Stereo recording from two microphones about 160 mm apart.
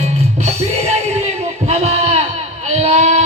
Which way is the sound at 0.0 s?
40° right (ahead or behind).